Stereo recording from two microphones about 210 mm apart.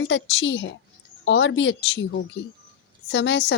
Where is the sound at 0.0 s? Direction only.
60° left (ahead or behind).